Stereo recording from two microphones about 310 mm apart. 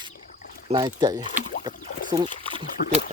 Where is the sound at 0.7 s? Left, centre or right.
Centre.